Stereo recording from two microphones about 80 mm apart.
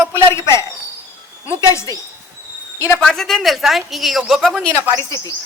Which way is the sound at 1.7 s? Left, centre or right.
Left.